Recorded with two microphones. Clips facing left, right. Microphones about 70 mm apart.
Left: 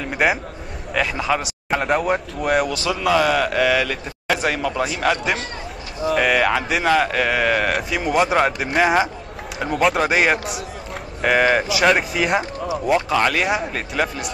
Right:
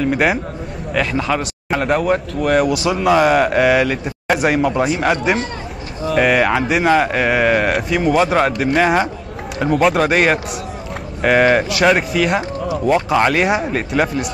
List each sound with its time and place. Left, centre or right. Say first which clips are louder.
0.1 s speech: right 3 dB; centre
2.7 s speech: right 5 dB; centre
3.1 s a man's voice: right 5 dB; right
3.6 s speech: right 5 dB; centre
4.6 s speech: right 6 dB; right
4.8 s speech: right 4 dB; centre
6.1 s speech: right 4 dB; centre